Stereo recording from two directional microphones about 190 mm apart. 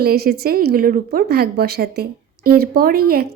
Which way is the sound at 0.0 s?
55° right (ahead or behind).